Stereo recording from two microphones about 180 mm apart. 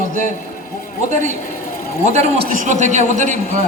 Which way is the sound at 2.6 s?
40° right (ahead or behind).